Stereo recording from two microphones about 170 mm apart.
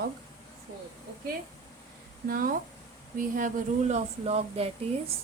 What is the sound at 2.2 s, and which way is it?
A woman's voice, 55° right (ahead or behind).